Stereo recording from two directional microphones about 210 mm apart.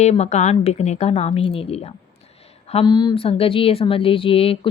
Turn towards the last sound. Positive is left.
turn(degrees=25)  # may be behind; listen again after turning